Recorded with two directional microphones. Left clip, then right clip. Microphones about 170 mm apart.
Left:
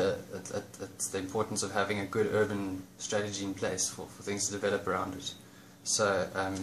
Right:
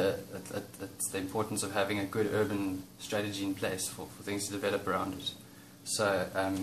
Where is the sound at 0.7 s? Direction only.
50° left (ahead or behind).